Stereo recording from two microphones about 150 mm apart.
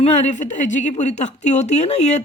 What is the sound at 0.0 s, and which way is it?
A woman's voice, 50° left (ahead or behind).